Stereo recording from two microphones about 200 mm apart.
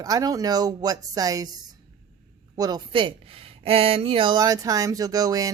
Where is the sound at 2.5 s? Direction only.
20° right (ahead or behind).